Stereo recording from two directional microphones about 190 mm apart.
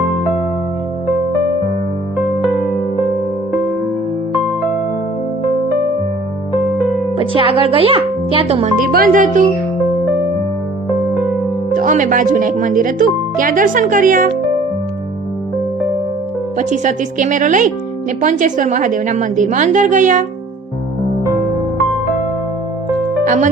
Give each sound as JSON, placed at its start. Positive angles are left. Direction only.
{"t": 7.2, "sound": "speech", "side_deg": -30}
{"t": 8.8, "sound": "speech", "side_deg": -45}
{"t": 11.1, "sound": "music", "side_deg": -5}
{"t": 11.7, "sound": "speech", "side_deg": -45}
{"t": 16.6, "sound": "a woman's voice", "side_deg": -40}
{"t": 23.2, "sound": "speech", "side_deg": -40}